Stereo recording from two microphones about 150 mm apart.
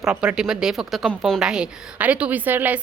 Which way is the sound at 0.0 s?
5° right (ahead or behind).